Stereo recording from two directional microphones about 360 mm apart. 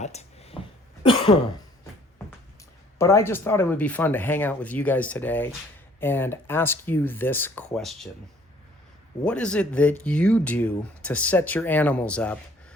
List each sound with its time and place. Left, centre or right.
0.0 s a sound: centre
3.0 s speech: centre
9.2 s speech: centre